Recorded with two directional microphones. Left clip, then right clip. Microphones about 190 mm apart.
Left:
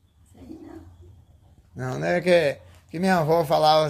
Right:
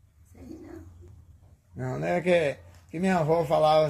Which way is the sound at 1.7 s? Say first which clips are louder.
Left 4 dB; 20° left (ahead or behind).